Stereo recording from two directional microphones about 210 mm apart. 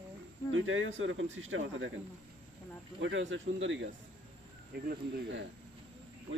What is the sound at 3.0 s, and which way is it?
Speech, 60° right (ahead or behind).